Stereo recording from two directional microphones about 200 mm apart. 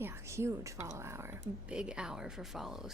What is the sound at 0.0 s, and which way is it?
Speech, 15° right (ahead or behind).